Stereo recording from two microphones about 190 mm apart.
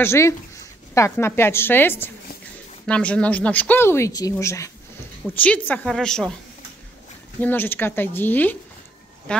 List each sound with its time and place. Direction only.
0.0 s a woman's voice: 15° left (ahead or behind)
7.3 s speech: 10° left (ahead or behind)